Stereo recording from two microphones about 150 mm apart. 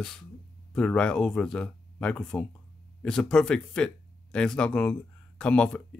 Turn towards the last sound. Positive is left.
turn(degrees=5)  # may be behind; listen again after turning